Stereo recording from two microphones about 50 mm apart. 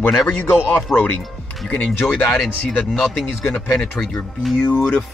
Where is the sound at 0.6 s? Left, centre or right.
Left.